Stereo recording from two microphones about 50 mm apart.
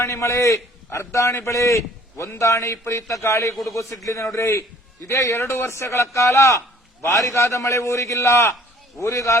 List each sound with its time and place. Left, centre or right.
0.0 s a man's voice: left
3.5 s a man's voice: centre
3.8 s a man's voice: left
9.0 s a man's voice: left